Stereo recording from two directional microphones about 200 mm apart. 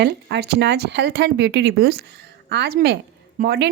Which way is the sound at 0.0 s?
55° right (ahead or behind).